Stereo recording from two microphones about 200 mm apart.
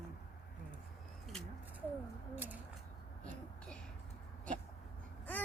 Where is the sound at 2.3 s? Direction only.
10° right (ahead or behind).